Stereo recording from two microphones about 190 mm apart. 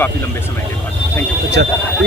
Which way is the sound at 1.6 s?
60° right (ahead or behind).